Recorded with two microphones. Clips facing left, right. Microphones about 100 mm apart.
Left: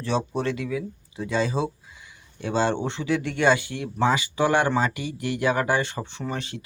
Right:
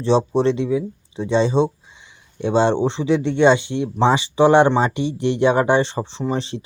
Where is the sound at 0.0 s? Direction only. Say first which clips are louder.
Right 9 dB; 25° right (ahead or behind).